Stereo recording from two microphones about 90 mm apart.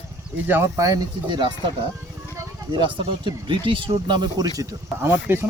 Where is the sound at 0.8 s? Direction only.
40° right (ahead or behind).